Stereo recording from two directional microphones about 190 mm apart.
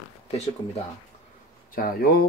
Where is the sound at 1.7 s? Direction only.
50° left (ahead or behind).